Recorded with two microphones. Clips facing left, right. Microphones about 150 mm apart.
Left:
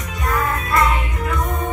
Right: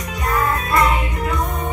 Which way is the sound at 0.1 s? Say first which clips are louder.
Right 1 dB; 20° right (ahead or behind).